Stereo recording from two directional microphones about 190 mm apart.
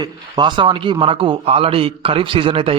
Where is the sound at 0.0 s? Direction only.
25° right (ahead or behind).